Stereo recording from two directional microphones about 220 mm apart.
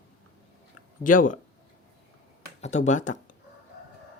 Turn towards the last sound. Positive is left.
turn(degrees=35)  # may be behind; listen again after turning